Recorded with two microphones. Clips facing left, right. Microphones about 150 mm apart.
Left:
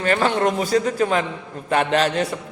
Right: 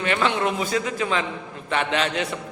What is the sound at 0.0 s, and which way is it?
A man's voice, 40° left (ahead or behind).